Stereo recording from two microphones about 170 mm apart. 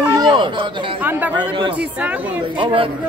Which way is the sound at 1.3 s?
30° right (ahead or behind).